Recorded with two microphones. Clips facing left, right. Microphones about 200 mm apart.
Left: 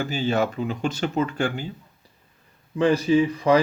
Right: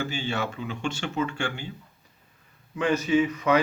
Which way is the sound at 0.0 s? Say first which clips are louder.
Left 6 dB; 40° left (ahead or behind).